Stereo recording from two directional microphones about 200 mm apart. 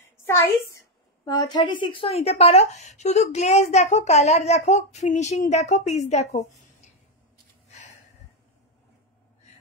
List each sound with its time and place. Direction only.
0.2 s a woman's voice: 15° left (ahead or behind); by 6.6 s 35° left (ahead or behind)